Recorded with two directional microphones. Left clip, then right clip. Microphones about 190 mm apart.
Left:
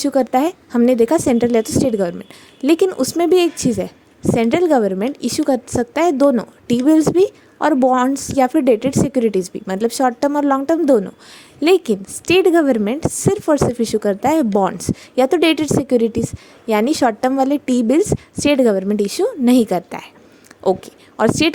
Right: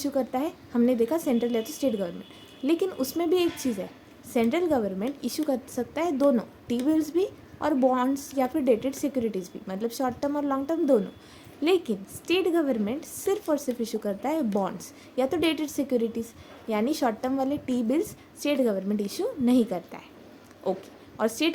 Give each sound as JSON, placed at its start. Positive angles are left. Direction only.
{"t": 0.0, "sound": "a woman's voice", "side_deg": 50}